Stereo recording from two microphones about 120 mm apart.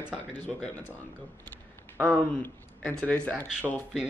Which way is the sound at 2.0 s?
10° left (ahead or behind).